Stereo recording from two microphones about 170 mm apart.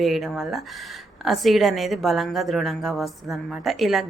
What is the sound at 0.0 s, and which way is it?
A woman's voice, centre (ahead or behind).